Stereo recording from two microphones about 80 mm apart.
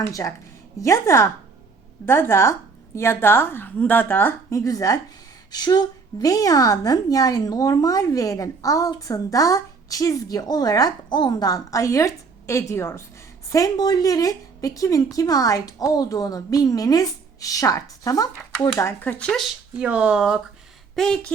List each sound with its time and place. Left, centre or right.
0.1 s a woman's voice: left
4.5 s a woman's voice: left
5.5 s a woman's voice: left
13.5 s a woman's voice: left
19.0 s speech: centre
19.7 s speech: centre
20.9 s speech: centre